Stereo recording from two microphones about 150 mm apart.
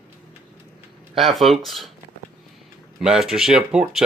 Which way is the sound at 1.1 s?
Centre (ahead or behind).